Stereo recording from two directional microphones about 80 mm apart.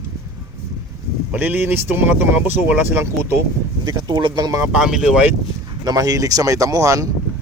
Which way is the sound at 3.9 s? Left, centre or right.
Right.